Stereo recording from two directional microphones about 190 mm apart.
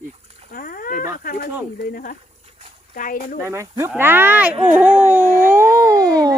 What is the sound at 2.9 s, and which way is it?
Speech, 45° left (ahead or behind).